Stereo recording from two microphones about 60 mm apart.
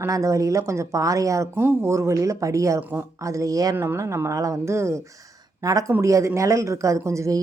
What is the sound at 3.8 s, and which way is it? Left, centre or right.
Speech, right.